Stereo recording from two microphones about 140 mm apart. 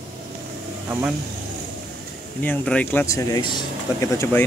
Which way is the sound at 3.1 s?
25° left (ahead or behind).